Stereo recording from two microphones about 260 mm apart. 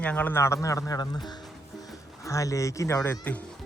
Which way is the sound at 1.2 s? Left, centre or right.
Centre.